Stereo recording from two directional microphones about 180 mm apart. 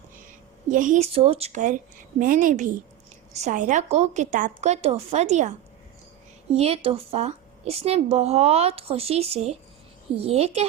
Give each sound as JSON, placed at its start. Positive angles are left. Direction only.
{"t": 0.7, "sound": "a woman's voice", "side_deg": -45}
{"t": 6.6, "sound": "a woman's voice", "side_deg": -35}